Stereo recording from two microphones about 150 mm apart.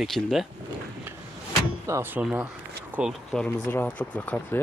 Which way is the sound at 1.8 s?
15° right (ahead or behind).